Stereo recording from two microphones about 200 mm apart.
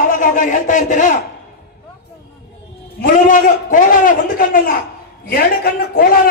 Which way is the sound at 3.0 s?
40° left (ahead or behind).